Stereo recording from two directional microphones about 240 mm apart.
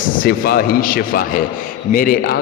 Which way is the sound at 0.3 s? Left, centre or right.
Left.